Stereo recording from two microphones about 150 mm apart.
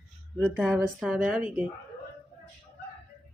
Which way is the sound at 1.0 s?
5° right (ahead or behind).